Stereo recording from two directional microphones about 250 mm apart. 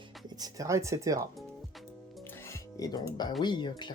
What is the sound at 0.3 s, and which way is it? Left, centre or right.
Speech, centre.